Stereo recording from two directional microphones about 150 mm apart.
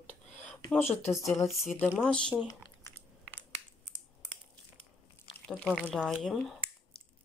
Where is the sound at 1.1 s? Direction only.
Centre (ahead or behind).